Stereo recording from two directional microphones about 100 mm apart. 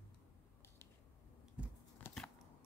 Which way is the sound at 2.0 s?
15° left (ahead or behind).